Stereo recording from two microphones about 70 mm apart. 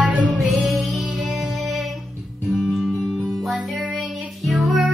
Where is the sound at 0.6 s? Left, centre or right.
Centre.